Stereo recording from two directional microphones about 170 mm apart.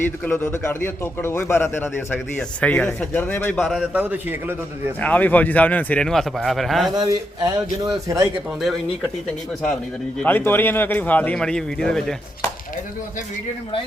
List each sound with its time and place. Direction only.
0.3 s a man's voice: 15° left (ahead or behind)
4.0 s a man's voice: 10° right (ahead or behind)
4.9 s a man's voice: 10° left (ahead or behind)
6.9 s a man's voice: 25° right (ahead or behind)
10.2 s a man's voice: 10° left (ahead or behind)